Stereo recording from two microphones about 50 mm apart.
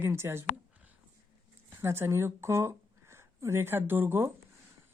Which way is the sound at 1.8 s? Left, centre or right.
Right.